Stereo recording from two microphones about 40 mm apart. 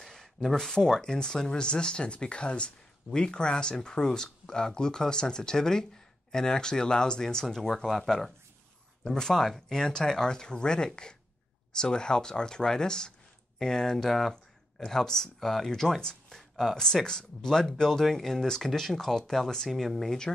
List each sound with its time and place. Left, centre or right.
0.0 s speech: centre
9.0 s speech: centre
16.7 s speech: centre